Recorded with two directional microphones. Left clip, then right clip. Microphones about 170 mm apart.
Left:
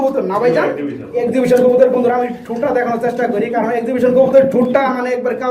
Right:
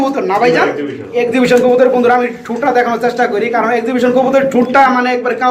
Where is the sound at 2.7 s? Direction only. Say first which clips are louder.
Right 4 dB; 25° right (ahead or behind).